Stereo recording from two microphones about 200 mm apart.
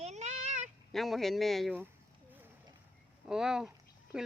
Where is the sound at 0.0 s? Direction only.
35° right (ahead or behind).